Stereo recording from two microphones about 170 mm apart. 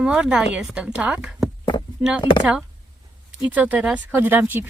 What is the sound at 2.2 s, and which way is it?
Speech, 30° left (ahead or behind).